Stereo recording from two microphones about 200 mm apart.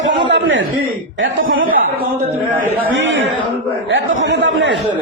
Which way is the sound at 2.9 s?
75° right (ahead or behind).